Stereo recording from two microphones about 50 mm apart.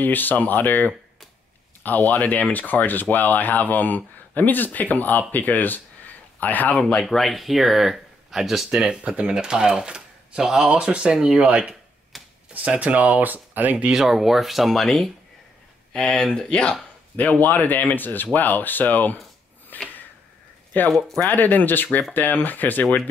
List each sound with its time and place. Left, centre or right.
0.0 s speech: left
7.0 s speech: centre
8.6 s speech: centre
12.1 s typewriter: centre
12.6 s speech: right
13.9 s speech: centre
15.9 s speech: centre
17.4 s speech: left
19.7 s a sound: left
20.9 s speech: centre
21.3 s speech: left